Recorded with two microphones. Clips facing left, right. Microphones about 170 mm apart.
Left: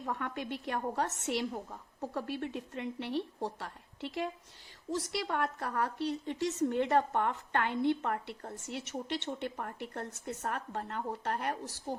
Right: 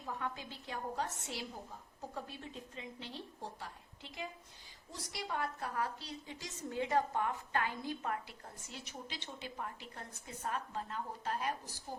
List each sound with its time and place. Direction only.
0.0 s a woman's voice: 65° left (ahead or behind)